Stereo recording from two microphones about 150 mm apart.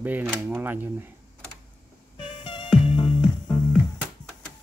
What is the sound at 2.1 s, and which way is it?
Music, 35° left (ahead or behind).